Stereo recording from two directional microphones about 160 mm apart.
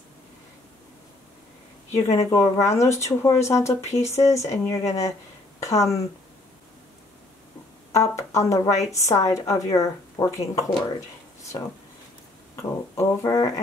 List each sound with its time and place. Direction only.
1.9 s speech: 20° left (ahead or behind)
7.9 s speech: 20° left (ahead or behind)